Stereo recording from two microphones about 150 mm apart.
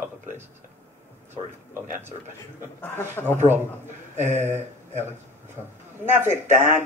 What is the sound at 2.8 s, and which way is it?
Speech, 15° left (ahead or behind).